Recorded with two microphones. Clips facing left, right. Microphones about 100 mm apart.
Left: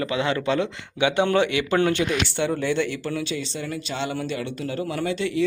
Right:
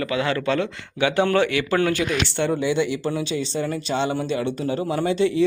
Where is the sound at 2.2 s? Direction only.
5° left (ahead or behind).